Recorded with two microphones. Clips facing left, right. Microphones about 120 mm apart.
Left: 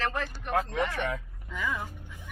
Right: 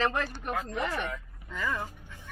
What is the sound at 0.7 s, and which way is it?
Speech, 70° left (ahead or behind).